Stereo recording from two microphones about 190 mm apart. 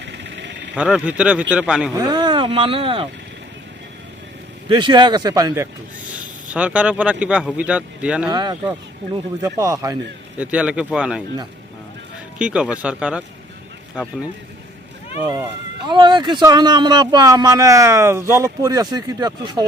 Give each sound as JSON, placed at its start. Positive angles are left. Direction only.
{"t": 0.0, "sound": "a sound", "side_deg": -65}
{"t": 0.8, "sound": "speech", "side_deg": -5}
{"t": 2.0, "sound": "speech", "side_deg": -25}
{"t": 4.7, "sound": "a man's voice", "side_deg": -25}
{"t": 6.1, "sound": "speech", "side_deg": -5}
{"t": 8.3, "sound": "a man's voice", "side_deg": -20}
{"t": 12.4, "sound": "speech", "side_deg": -5}
{"t": 15.9, "sound": "a man's voice", "side_deg": -25}